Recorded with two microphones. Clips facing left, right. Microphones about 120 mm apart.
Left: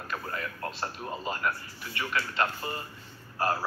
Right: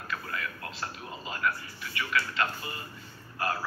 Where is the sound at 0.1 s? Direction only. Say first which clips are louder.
Left 1 dB; 40° left (ahead or behind).